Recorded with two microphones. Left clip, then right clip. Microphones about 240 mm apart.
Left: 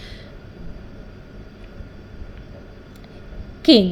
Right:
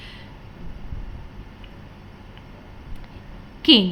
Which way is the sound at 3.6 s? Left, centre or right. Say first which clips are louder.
Left 1 dB; centre.